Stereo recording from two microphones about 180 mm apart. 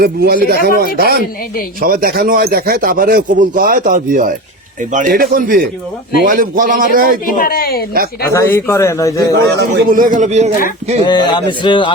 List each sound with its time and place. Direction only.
0.0 s speech: 55° right (ahead or behind)
7.3 s speech: 55° left (ahead or behind)
8.3 s speech: 15° left (ahead or behind)
9.3 s speech: 65° right (ahead or behind)
9.9 s speech: 50° right (ahead or behind)
11.0 s speech: 25° left (ahead or behind)